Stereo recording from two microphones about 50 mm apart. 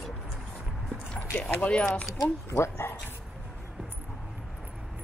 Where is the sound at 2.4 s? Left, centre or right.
Left.